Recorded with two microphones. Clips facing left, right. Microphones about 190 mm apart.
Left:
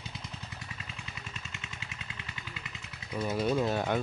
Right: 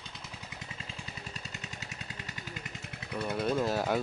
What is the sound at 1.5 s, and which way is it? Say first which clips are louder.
Vehicle: right 2 dB; 40° right (ahead or behind).